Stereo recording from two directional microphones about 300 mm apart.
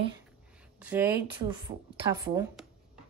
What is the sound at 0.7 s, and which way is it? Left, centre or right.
Speech, centre.